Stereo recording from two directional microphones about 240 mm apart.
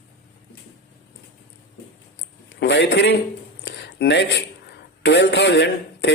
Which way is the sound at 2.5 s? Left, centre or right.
Left.